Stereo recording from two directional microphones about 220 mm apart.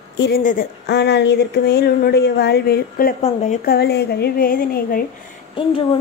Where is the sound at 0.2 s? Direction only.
40° left (ahead or behind).